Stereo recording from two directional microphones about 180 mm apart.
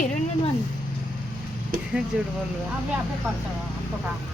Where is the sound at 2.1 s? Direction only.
5° right (ahead or behind).